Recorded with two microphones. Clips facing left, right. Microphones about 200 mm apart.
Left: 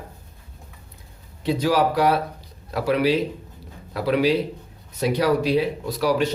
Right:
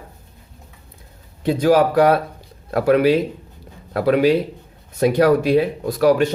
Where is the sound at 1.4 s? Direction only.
50° right (ahead or behind).